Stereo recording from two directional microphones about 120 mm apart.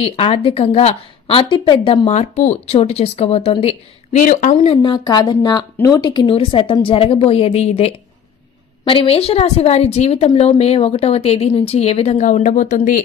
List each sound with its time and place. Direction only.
0.0 s a woman's voice: 55° left (ahead or behind)
2.0 s a woman's voice: 75° left (ahead or behind); by 3.5 s 60° left (ahead or behind)
3.6 s speech: 75° left (ahead or behind)
4.8 s a woman's voice: 40° left (ahead or behind); by 7.9 s 60° left (ahead or behind)
8.8 s a woman's voice: 50° left (ahead or behind); by 13.0 s 90° left